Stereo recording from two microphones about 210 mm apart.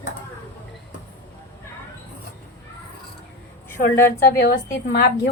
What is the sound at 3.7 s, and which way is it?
Speech, 40° left (ahead or behind).